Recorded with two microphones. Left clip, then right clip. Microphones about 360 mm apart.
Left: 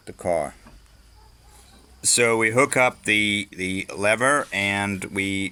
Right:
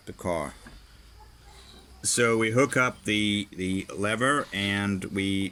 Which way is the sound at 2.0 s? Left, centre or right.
Centre.